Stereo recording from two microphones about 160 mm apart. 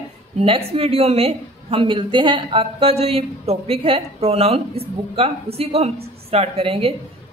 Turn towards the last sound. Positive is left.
turn(degrees=-35)  # may be behind; listen again after turning